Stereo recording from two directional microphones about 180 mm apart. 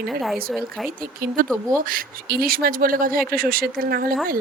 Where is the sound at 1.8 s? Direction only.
50° right (ahead or behind).